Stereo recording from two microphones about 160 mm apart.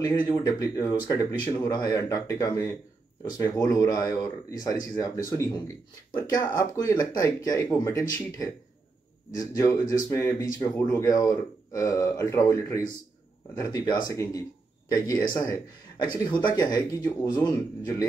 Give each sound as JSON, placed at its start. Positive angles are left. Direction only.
{"t": 0.4, "sound": "speech", "side_deg": 20}
{"t": 9.4, "sound": "speech", "side_deg": 20}